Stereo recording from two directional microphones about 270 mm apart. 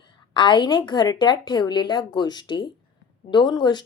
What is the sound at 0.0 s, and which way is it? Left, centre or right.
Speech, centre.